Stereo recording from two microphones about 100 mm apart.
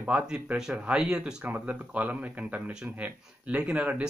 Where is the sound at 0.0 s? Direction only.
15° right (ahead or behind).